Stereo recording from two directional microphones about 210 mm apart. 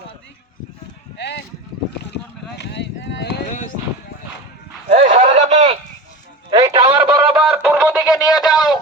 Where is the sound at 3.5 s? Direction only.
40° left (ahead or behind).